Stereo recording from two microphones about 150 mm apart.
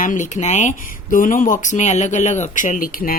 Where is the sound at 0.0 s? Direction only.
60° left (ahead or behind).